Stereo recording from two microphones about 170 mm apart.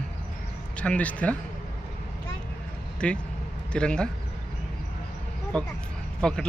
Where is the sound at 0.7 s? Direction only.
5° left (ahead or behind).